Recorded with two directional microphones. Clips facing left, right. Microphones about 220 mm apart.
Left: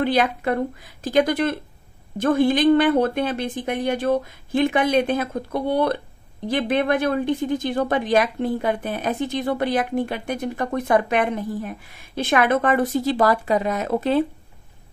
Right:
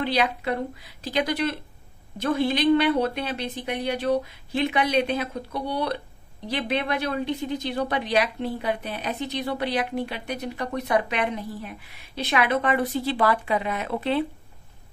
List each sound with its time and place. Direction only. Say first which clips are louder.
0.0 s speech: left 4 dB; 50° left (ahead or behind)